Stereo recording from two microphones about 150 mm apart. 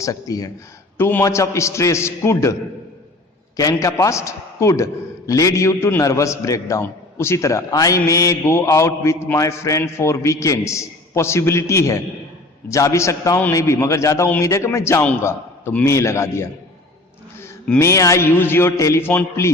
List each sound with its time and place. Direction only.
0.0 s a man's voice: 25° left (ahead or behind)
3.6 s a man's voice: 20° left (ahead or behind)